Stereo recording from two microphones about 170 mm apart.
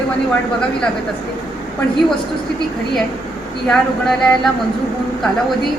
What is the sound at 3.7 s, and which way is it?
Speech, centre (ahead or behind).